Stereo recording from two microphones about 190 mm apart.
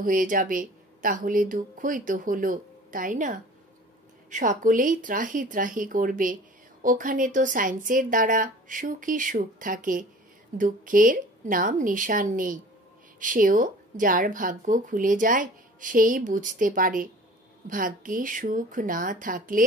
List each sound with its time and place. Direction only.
0.0 s speech: 45° right (ahead or behind)